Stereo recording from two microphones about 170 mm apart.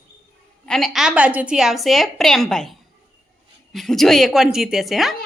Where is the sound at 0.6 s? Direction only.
Centre (ahead or behind).